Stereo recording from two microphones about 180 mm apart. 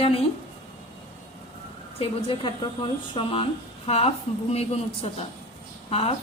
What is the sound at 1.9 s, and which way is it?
Speech, 30° left (ahead or behind).